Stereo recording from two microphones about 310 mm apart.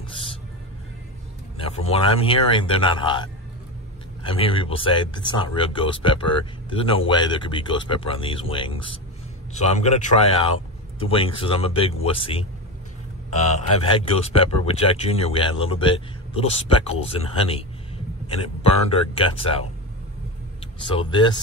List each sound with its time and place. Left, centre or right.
0.1 s music: centre
1.6 s speech: centre
13.5 s speech: centre
20.8 s speech: centre